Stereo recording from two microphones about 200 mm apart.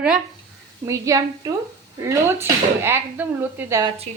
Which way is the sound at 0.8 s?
15° right (ahead or behind).